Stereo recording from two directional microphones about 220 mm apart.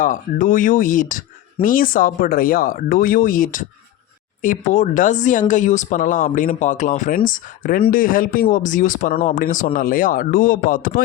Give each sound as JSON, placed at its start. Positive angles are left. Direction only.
{"t": 0.0, "sound": "speech", "side_deg": 35}